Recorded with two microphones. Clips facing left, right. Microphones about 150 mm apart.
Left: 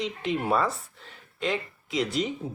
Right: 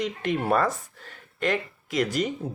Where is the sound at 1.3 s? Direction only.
60° right (ahead or behind).